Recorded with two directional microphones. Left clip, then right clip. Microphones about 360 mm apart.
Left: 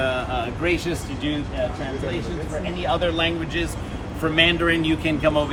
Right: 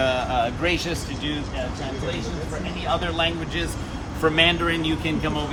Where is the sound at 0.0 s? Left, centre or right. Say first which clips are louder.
Right 2 dB; right.